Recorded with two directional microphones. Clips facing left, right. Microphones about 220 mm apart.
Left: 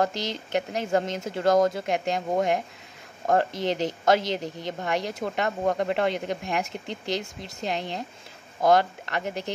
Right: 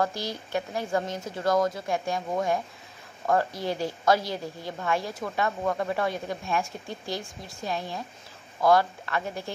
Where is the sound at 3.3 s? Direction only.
20° left (ahead or behind).